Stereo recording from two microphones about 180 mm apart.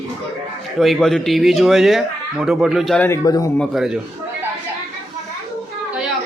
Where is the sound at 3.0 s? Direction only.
15° left (ahead or behind).